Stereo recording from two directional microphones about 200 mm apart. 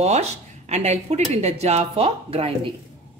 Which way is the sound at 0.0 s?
35° right (ahead or behind).